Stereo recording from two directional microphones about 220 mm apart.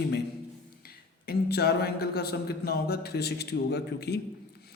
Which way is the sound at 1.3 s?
45° left (ahead or behind).